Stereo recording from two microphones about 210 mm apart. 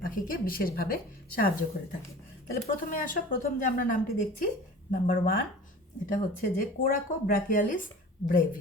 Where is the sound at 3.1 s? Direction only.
40° left (ahead or behind).